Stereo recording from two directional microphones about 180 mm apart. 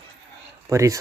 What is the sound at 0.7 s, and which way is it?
Speech, 15° right (ahead or behind).